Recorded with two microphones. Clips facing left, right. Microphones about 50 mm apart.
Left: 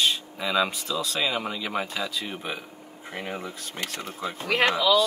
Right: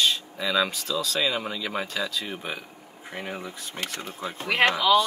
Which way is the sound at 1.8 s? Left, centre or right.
Left.